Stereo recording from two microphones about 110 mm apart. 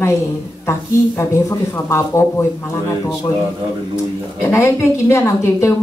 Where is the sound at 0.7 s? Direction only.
25° left (ahead or behind).